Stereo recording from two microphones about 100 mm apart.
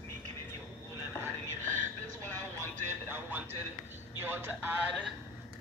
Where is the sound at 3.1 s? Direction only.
20° right (ahead or behind).